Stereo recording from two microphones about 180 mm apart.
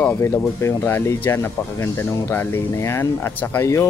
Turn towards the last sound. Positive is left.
turn(degrees=15)  # may be behind; listen again after turning